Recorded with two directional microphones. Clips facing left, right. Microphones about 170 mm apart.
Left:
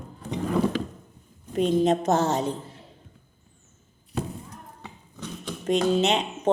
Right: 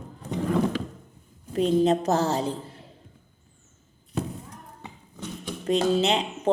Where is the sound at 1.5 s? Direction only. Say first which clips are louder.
Even; 35° right (ahead or behind).